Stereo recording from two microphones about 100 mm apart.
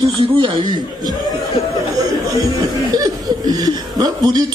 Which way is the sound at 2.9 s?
40° right (ahead or behind).